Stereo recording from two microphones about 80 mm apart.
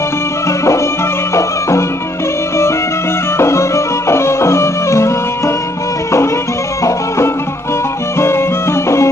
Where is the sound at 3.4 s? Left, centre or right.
Left.